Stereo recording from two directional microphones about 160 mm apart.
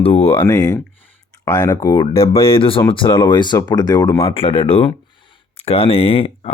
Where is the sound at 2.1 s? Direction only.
35° left (ahead or behind).